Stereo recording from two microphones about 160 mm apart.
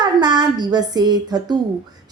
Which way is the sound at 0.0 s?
25° right (ahead or behind).